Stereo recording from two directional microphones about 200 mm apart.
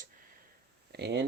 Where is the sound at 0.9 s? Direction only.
55° right (ahead or behind).